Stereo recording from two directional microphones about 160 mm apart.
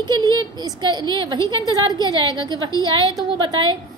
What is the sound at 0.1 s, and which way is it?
A woman's voice, 25° right (ahead or behind).